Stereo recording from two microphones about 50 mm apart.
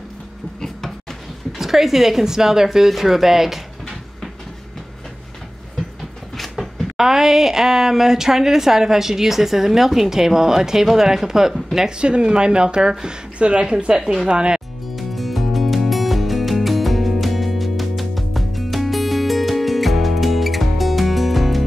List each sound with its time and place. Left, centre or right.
1.6 s speech: centre
6.3 s a sound: centre
7.0 s speech: centre
12.0 s speech: right
15.0 s music: centre